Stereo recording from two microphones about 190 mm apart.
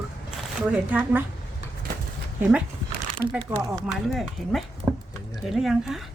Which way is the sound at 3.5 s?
10° right (ahead or behind).